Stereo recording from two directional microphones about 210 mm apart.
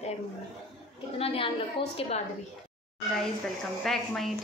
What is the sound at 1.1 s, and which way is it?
Speech, 25° left (ahead or behind).